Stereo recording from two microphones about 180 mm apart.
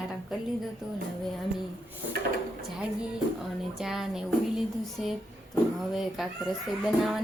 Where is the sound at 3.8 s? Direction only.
Centre (ahead or behind).